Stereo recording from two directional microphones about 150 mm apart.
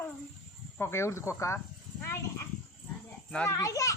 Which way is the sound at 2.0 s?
15° left (ahead or behind).